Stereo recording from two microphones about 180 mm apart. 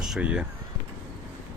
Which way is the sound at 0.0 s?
5° right (ahead or behind).